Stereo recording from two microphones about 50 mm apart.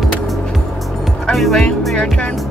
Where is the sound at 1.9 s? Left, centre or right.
Left.